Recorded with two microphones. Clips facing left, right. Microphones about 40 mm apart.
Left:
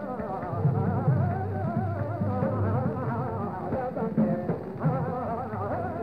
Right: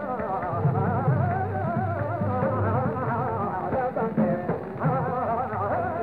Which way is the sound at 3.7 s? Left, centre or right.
Right.